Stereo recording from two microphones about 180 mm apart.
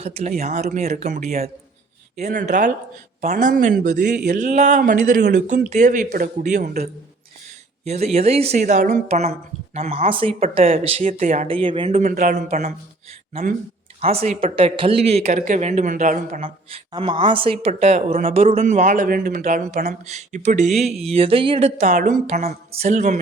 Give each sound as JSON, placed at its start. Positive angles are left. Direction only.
{"t": 0.0, "sound": "speech", "side_deg": -35}
{"t": 7.9, "sound": "speech", "side_deg": -35}
{"t": 11.4, "sound": "speech", "side_deg": -30}
{"t": 12.0, "sound": "speech", "side_deg": -50}
{"t": 14.0, "sound": "speech", "side_deg": -35}
{"t": 16.7, "sound": "a woman's voice", "side_deg": -30}
{"t": 18.6, "sound": "speech", "side_deg": -45}